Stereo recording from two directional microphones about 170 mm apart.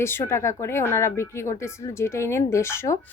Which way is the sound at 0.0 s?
15° left (ahead or behind).